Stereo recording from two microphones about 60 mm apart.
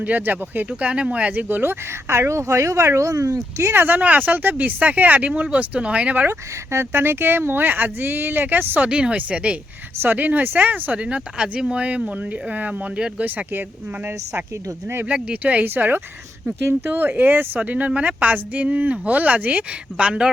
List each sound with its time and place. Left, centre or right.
0.0 s speech: right
0.7 s speech: right
2.1 s speech: right
3.6 s speech: right
6.2 s speech: right
8.9 s speech: centre
10.9 s speech: centre; by 14.4 s right
15.0 s speech: right
15.6 s speech: right; by 20.3 s centre